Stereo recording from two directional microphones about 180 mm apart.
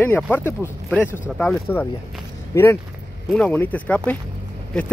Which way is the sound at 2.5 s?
15° left (ahead or behind).